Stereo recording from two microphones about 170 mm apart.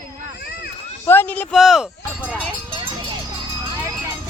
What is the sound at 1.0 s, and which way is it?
Speech, 10° left (ahead or behind).